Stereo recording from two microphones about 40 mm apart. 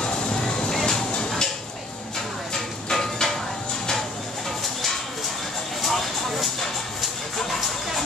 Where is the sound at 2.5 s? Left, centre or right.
Centre.